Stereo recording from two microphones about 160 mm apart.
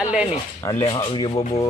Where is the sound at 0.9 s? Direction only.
30° left (ahead or behind).